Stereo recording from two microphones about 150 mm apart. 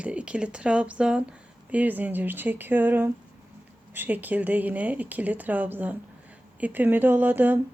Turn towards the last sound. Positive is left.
turn(degrees=-10)  # may be behind; listen again after turning